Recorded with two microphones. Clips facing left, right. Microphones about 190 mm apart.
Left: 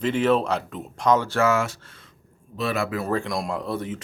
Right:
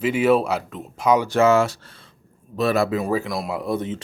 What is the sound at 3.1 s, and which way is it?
Speech, 5° right (ahead or behind).